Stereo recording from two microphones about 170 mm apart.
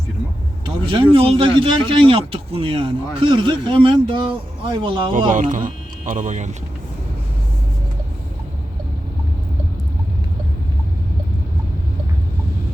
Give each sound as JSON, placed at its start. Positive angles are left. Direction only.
{"t": 0.6, "sound": "speech", "side_deg": -30}
{"t": 5.3, "sound": "speech", "side_deg": -50}